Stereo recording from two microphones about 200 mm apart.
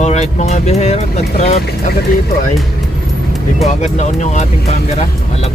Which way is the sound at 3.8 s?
35° left (ahead or behind).